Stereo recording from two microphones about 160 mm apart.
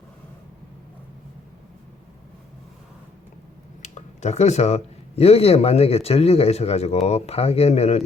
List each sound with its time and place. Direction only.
3.8 s speech: 45° left (ahead or behind)